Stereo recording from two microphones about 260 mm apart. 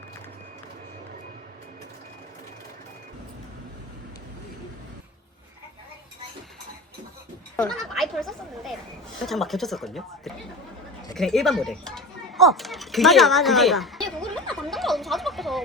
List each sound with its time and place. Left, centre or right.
7.5 s speech: centre